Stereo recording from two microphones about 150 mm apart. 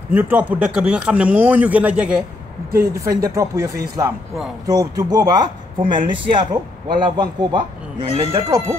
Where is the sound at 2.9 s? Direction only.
20° right (ahead or behind).